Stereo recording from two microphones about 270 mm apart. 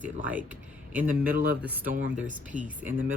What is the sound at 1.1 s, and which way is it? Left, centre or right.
Speech, right.